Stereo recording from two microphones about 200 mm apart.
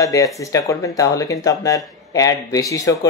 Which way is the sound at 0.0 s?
15° left (ahead or behind).